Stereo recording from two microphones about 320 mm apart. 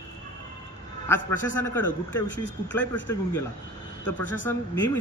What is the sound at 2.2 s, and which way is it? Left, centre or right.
Speech, left.